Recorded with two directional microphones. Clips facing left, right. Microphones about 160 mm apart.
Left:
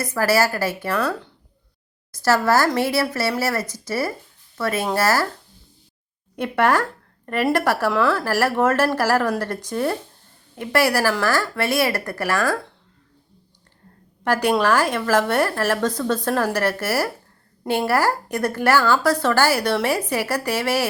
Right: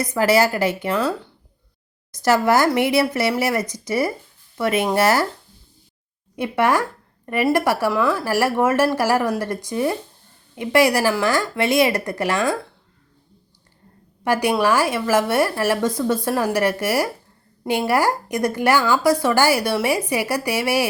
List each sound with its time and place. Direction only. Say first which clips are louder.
0.0 s a woman's voice: right 2 dB; 20° right (ahead or behind)
2.1 s a woman's voice: right 1 dB; 15° right (ahead or behind)
6.3 s a woman's voice: even; 10° right (ahead or behind)
14.3 s a woman's voice: even; 10° right (ahead or behind)